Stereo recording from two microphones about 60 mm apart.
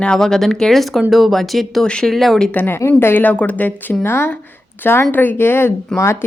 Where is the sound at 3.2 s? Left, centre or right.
Left.